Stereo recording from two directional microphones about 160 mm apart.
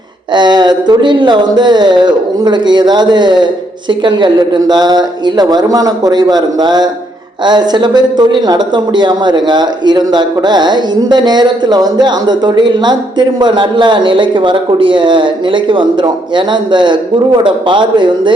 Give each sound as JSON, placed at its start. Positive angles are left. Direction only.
{"t": 0.3, "sound": "speech", "side_deg": -25}